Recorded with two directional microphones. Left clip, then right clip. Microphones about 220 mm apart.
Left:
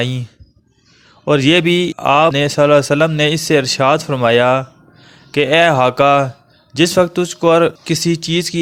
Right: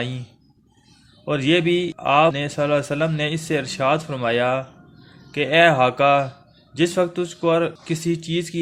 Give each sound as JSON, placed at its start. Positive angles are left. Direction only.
{"t": 1.2, "sound": "a man's voice", "side_deg": 45}